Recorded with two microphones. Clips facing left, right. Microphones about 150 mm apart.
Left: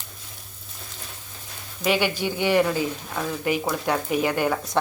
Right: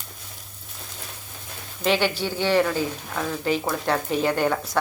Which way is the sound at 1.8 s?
10° left (ahead or behind).